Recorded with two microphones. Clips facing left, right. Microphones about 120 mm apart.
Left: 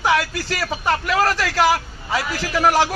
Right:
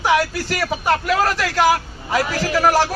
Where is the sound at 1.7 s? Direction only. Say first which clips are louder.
Right 2 dB; 45° right (ahead or behind).